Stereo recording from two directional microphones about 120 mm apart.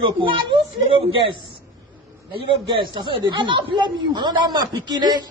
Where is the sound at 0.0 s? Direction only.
40° right (ahead or behind).